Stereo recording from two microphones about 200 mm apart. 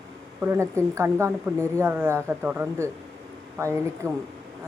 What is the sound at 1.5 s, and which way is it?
Speech, 5° left (ahead or behind).